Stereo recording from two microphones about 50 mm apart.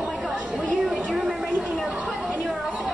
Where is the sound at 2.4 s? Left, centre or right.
Centre.